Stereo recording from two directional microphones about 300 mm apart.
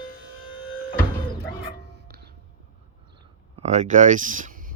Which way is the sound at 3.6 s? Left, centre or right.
Right.